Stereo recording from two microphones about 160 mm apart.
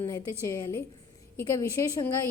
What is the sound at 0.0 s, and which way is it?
Speech, 25° left (ahead or behind).